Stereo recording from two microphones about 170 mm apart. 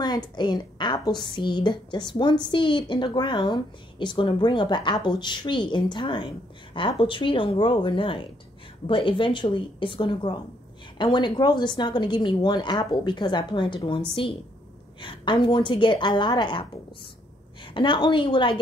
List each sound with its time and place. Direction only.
0.0 s a woman's voice: 25° left (ahead or behind)
17.7 s a woman's voice: 30° left (ahead or behind)